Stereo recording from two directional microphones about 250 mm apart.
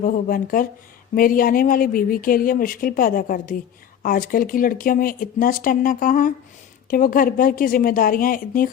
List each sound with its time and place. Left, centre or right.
0.0 s speech: left